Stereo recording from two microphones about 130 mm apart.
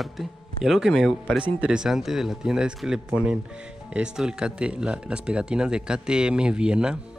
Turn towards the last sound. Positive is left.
turn(degrees=-5)  # may be behind; listen again after turning